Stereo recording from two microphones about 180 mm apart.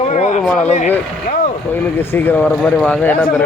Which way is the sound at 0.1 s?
40° left (ahead or behind).